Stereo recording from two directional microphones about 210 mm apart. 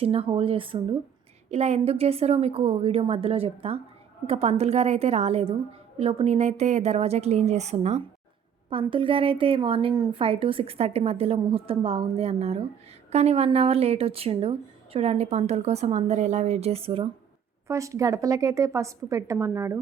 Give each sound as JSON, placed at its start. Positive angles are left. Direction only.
{"t": 0.0, "sound": "a woman's voice", "side_deg": -25}
{"t": 17.7, "sound": "a woman's voice", "side_deg": -15}